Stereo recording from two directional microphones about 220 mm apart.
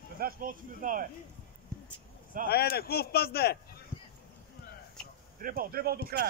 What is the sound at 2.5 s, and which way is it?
A man's voice, 45° left (ahead or behind).